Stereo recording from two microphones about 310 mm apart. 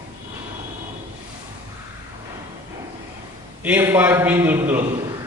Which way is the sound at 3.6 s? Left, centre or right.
Centre.